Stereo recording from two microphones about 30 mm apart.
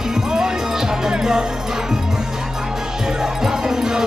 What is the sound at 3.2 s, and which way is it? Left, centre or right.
Music, centre.